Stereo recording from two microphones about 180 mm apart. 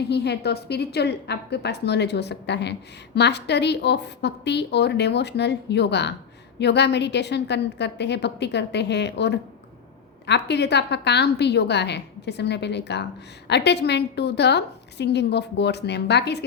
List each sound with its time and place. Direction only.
0.1 s a woman's voice: 65° left (ahead or behind)